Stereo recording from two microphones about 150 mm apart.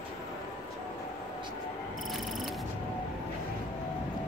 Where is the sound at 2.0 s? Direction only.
Centre (ahead or behind).